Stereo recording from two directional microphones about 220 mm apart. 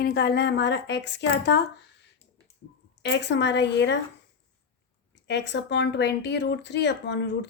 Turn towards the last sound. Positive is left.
turn(degrees=50)  # may be behind; listen again after turning